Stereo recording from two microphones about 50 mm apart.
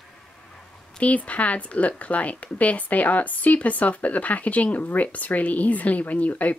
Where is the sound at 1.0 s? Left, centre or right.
Left.